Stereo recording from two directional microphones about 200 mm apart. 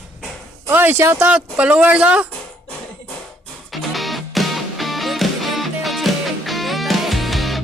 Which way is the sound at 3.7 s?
Centre (ahead or behind).